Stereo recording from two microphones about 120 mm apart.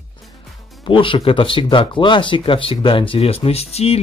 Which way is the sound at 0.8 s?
45° left (ahead or behind).